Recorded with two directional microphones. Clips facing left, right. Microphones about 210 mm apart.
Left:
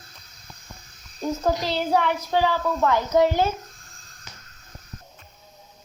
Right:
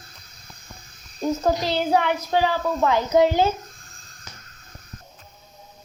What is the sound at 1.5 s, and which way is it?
A child's voice, 10° right (ahead or behind).